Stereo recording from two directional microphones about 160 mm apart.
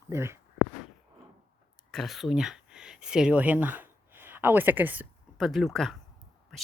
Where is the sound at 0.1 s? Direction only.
15° right (ahead or behind).